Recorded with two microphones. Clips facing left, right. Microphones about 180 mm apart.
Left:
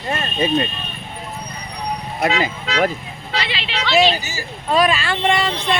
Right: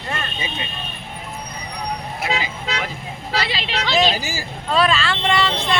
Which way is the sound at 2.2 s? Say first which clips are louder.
Left 8 dB; 50° left (ahead or behind).